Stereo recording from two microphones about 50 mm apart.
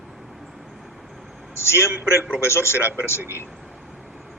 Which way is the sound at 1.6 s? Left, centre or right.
Left.